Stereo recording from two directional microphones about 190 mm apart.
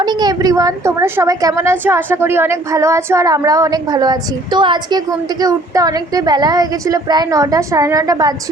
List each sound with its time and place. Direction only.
0.0 s a woman's voice: 20° right (ahead or behind)